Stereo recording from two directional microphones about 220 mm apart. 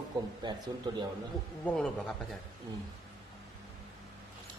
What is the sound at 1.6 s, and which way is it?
Speech, 5° left (ahead or behind).